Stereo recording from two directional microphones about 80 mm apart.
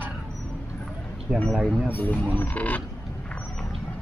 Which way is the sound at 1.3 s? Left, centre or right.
Centre.